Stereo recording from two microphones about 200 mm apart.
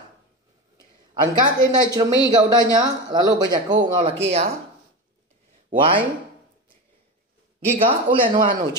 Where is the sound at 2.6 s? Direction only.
20° right (ahead or behind).